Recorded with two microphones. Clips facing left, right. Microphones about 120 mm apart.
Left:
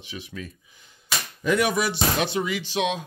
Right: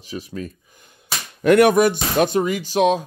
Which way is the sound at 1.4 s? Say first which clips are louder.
Right 10 dB; 60° right (ahead or behind).